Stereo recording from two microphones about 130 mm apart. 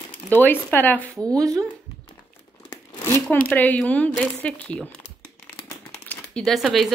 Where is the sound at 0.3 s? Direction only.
15° left (ahead or behind).